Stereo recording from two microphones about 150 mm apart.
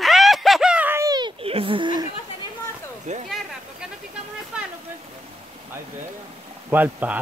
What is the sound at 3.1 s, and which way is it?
Speech, 50° right (ahead or behind).